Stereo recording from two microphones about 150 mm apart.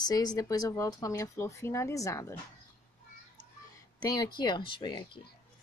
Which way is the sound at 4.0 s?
25° left (ahead or behind).